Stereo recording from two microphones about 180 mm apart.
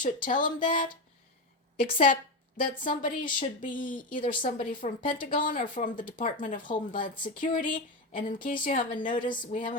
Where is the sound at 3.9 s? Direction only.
50° left (ahead or behind).